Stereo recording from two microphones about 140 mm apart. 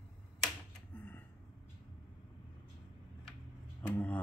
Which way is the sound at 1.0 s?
10° left (ahead or behind).